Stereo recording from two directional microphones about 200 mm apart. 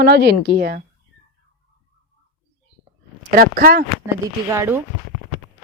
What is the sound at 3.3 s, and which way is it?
Speech, 45° right (ahead or behind).